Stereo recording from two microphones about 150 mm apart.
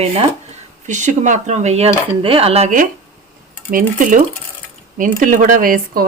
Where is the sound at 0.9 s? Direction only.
55° right (ahead or behind).